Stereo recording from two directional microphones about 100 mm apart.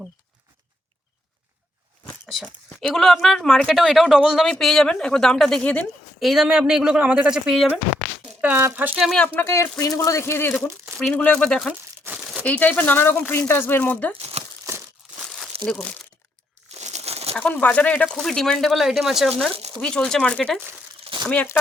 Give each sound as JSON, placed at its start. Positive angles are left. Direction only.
{"t": 2.8, "sound": "speech", "side_deg": 0}
{"t": 6.1, "sound": "speech", "side_deg": 0}
{"t": 8.4, "sound": "speech", "side_deg": -15}
{"t": 9.0, "sound": "speech", "side_deg": 0}
{"t": 9.4, "sound": "speech", "side_deg": 30}
{"t": 10.9, "sound": "speech", "side_deg": 10}
{"t": 14.2, "sound": "crumpling", "side_deg": -90}
{"t": 14.7, "sound": "crumpling", "side_deg": -35}
{"t": 15.0, "sound": "crumpling", "side_deg": 0}
{"t": 15.6, "sound": "speech", "side_deg": 10}
{"t": 16.7, "sound": "crumpling", "side_deg": -90}
{"t": 17.3, "sound": "speech", "side_deg": 15}
{"t": 21.0, "sound": "a sound", "side_deg": -55}